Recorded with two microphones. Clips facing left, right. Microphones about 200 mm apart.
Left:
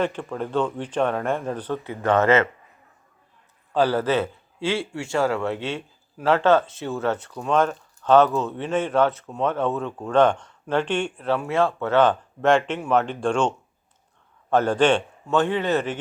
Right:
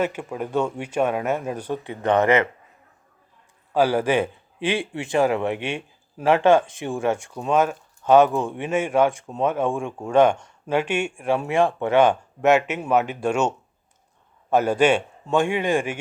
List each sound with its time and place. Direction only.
0.0 s speech: 10° right (ahead or behind)
3.7 s speech: 10° right (ahead or behind)
14.5 s speech: 10° right (ahead or behind)